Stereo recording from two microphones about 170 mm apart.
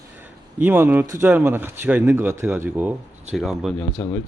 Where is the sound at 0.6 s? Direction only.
10° right (ahead or behind).